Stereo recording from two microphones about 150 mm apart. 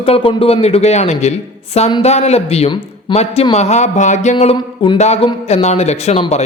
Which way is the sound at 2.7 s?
30° left (ahead or behind).